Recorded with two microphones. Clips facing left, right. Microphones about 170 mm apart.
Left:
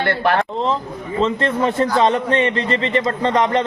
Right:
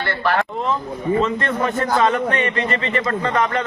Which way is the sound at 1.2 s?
30° left (ahead or behind).